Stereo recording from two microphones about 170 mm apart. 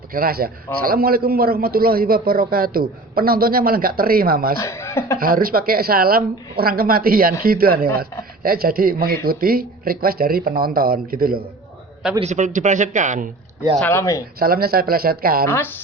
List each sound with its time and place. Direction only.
0.1 s a man's voice: 60° right (ahead or behind)
4.6 s a sound: 15° left (ahead or behind)
5.2 s a man's voice: 60° right (ahead or behind)
12.2 s speech: 45° right (ahead or behind)
13.7 s speech: 10° left (ahead or behind)
14.3 s a man's voice: 60° right (ahead or behind)
15.4 s speech: 15° left (ahead or behind)